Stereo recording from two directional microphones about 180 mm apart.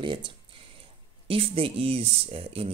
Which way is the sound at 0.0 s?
30° right (ahead or behind).